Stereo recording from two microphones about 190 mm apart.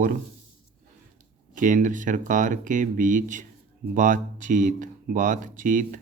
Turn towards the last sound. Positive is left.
turn(degrees=-45)  # may be behind; listen again after turning